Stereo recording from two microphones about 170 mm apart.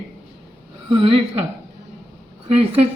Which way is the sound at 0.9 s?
30° right (ahead or behind).